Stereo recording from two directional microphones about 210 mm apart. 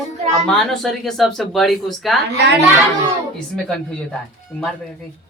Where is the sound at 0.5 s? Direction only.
Centre (ahead or behind).